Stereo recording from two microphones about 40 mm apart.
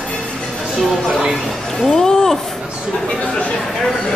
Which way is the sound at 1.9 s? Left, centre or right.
Centre.